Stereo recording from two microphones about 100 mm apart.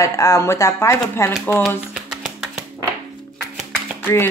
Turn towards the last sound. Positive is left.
turn(degrees=20)  # may be behind; listen again after turning